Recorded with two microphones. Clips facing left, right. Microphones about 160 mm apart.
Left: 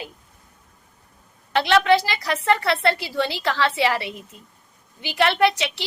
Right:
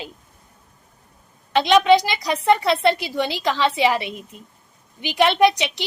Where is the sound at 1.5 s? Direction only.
20° right (ahead or behind).